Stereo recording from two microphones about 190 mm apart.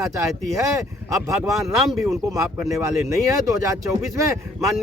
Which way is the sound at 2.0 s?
15° right (ahead or behind).